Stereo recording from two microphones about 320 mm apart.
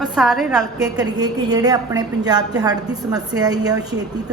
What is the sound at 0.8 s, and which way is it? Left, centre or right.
A woman's voice, centre.